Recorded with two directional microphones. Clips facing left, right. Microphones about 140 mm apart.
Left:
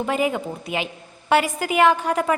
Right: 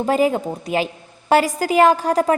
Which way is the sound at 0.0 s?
35° right (ahead or behind).